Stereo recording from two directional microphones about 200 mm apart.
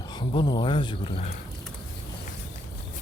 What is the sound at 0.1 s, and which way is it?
Speech, 20° left (ahead or behind).